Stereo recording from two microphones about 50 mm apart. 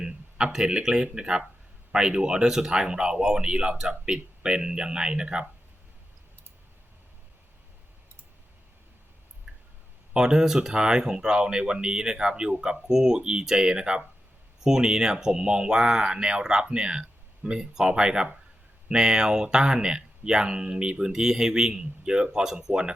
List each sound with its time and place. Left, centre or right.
0.0 s speech: centre
9.5 s a sound: centre
10.2 s speech: centre